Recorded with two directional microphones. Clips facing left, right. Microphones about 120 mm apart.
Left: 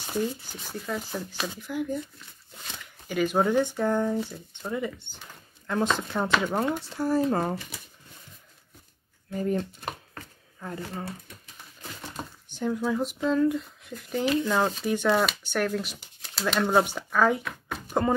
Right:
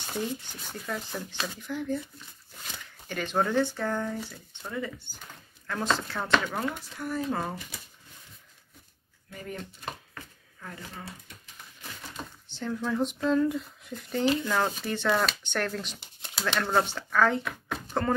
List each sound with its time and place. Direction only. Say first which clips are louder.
0.0 s speech: left 3 dB; 5° left (ahead or behind)
3.1 s speech: left 4 dB; 5° left (ahead or behind)
6.5 s speech: left 5 dB; 30° left (ahead or behind)
9.3 s speech: left 11 dB; 35° left (ahead or behind)
10.1 s a sound: left 2 dB; 35° left (ahead or behind)
12.4 s speech: left 4 dB; 10° left (ahead or behind)
17.5 s chopping: right 1 dB; centre (ahead or behind)